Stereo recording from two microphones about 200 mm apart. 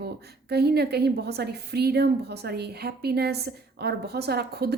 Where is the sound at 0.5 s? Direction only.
55° right (ahead or behind).